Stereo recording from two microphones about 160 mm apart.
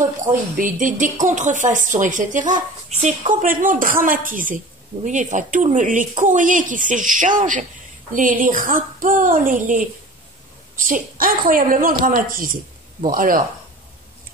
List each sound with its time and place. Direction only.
0.0 s a woman's voice: 55° right (ahead or behind)